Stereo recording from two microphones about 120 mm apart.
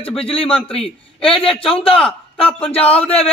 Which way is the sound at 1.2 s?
50° left (ahead or behind).